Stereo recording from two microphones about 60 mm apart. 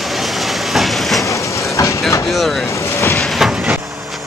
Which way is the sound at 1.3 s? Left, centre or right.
Left.